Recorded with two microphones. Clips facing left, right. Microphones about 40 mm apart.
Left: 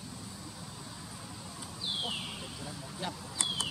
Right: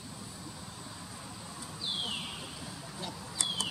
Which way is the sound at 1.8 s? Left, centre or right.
Centre.